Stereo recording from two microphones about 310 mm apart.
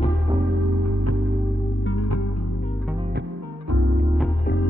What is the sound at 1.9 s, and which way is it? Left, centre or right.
Music, left.